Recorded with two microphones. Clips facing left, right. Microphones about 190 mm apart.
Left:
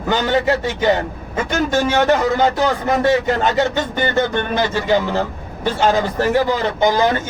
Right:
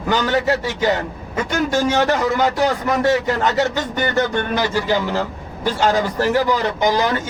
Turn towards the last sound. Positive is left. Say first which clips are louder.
# left 2 dB
turn(degrees=25)  # may be behind; listen again after turning